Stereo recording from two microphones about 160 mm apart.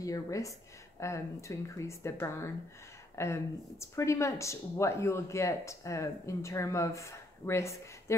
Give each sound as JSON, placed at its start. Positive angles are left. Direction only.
{"t": 0.0, "sound": "speech", "side_deg": 20}